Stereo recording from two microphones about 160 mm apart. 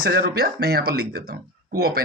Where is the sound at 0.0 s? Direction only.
85° right.